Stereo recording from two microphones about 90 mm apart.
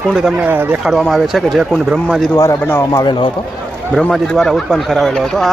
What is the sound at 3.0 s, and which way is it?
Speech, 60° left (ahead or behind).